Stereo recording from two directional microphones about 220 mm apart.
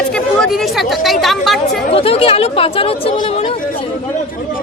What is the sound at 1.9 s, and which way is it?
Speech, 25° left (ahead or behind).